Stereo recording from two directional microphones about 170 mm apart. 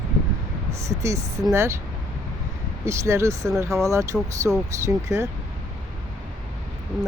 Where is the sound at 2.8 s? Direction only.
15° right (ahead or behind).